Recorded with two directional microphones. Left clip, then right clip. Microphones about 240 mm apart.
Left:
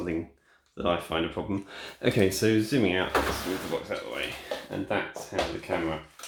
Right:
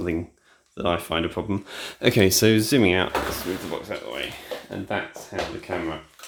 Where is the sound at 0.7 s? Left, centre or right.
Right.